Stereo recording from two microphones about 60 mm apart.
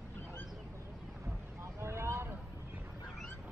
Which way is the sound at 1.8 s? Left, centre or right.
Right.